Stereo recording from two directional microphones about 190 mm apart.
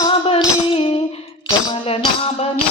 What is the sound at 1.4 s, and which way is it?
Tambourine, 30° left (ahead or behind).